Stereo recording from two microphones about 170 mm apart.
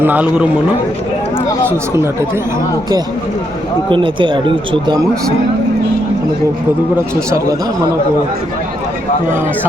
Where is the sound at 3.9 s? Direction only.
30° right (ahead or behind).